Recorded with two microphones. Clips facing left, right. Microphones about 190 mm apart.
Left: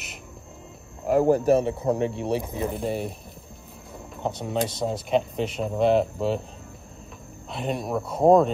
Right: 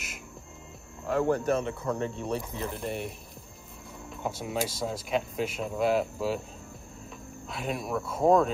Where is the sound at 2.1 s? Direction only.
65° left (ahead or behind).